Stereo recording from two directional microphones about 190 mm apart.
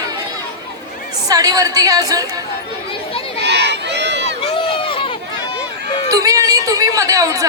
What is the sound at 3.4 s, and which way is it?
Run, 65° right (ahead or behind).